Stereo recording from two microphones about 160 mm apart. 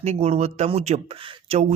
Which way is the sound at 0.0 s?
40° right (ahead or behind).